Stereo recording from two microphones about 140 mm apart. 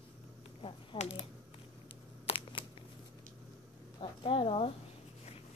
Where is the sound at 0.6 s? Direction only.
45° left (ahead or behind).